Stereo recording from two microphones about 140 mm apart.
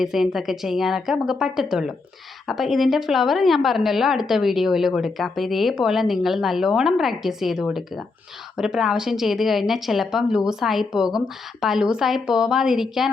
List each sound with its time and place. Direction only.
0.0 s a woman's voice: centre (ahead or behind)